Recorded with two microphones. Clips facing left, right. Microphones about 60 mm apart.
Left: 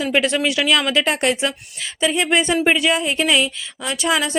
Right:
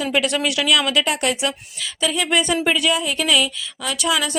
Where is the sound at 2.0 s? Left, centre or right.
Left.